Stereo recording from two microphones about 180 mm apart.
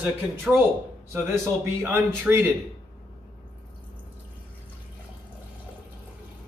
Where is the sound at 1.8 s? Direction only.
10° right (ahead or behind).